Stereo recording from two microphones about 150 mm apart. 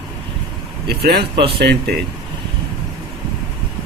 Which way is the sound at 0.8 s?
90° right.